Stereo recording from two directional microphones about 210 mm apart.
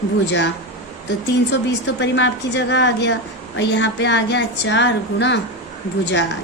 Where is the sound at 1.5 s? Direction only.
55° left (ahead or behind).